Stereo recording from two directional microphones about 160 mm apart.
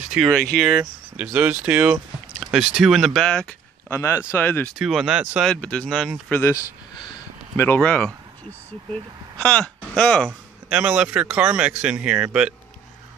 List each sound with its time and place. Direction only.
0.0 s speech: 5° right (ahead or behind)
0.3 s speech: 10° left (ahead or behind)
0.6 s speech: 5° right (ahead or behind); by 4.6 s 15° left (ahead or behind)
4.7 s speech: 5° right (ahead or behind)
5.5 s speech: 5° left (ahead or behind)
6.4 s a sound: 25° left (ahead or behind)
7.6 s speech: 10° left (ahead or behind)
10.7 s speech: 5° right (ahead or behind)